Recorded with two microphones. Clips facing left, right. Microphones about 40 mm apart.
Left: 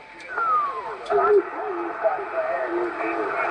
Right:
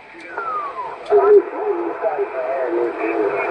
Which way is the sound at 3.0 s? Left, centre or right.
Centre.